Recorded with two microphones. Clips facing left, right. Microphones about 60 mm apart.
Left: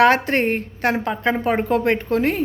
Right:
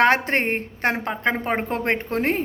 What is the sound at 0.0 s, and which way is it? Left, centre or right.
Speech, right.